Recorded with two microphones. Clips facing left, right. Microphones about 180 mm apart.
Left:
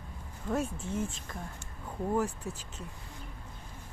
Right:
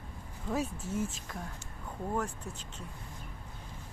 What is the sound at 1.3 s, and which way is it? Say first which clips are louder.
Speech: even; centre (ahead or behind).